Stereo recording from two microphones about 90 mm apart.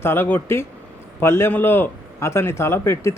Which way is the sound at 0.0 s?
25° left (ahead or behind).